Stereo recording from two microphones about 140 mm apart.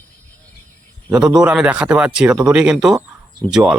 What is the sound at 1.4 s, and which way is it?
Speech, 5° right (ahead or behind).